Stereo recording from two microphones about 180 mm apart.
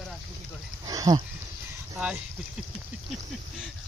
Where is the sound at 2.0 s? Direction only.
5° right (ahead or behind).